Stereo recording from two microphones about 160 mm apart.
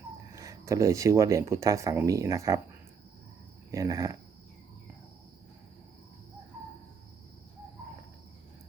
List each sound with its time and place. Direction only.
0.3 s speech: 20° right (ahead or behind)
3.7 s speech: 20° right (ahead or behind)